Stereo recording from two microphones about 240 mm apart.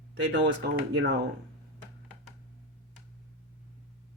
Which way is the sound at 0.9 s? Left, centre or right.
Right.